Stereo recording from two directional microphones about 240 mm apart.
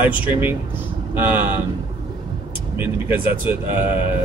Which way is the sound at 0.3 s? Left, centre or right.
Centre.